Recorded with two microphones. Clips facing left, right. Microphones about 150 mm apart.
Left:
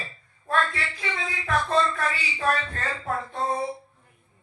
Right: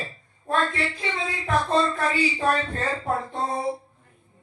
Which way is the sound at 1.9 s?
25° right (ahead or behind).